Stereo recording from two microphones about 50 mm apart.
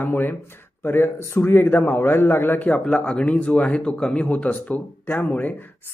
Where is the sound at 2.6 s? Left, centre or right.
Left.